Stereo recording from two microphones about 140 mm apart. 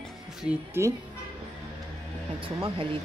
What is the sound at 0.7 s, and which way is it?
Speech, 20° right (ahead or behind).